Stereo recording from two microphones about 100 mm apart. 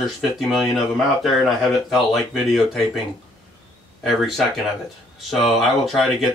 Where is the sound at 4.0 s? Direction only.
Centre (ahead or behind).